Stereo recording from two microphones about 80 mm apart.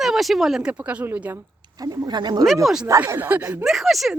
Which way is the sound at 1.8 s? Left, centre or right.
Right.